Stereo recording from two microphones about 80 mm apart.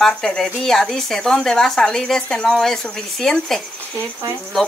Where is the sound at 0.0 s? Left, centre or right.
Centre.